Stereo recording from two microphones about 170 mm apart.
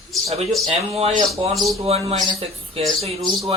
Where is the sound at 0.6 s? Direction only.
35° right (ahead or behind).